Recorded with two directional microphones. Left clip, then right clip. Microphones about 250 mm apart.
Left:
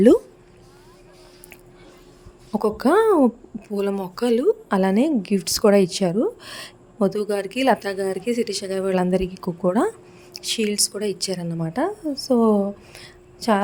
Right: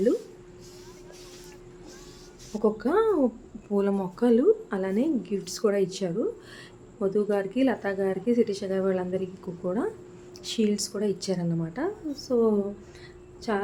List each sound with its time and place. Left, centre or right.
2.5 s a woman's voice: left